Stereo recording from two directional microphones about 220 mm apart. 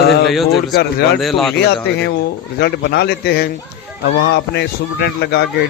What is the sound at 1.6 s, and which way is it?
Speech, 50° left (ahead or behind).